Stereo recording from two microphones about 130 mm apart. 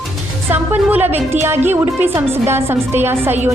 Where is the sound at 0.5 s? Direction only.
15° right (ahead or behind).